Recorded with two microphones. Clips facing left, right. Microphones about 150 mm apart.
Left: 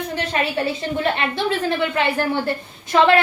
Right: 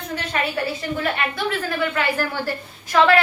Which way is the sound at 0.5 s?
25° left (ahead or behind).